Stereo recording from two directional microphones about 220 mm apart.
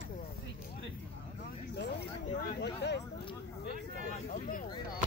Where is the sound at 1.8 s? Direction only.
50° left (ahead or behind).